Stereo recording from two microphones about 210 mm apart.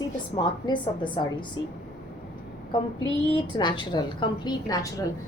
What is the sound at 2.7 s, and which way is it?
A woman's voice, 20° left (ahead or behind).